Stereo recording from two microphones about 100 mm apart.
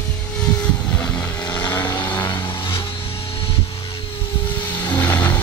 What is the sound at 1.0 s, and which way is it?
Vehicle, 15° left (ahead or behind).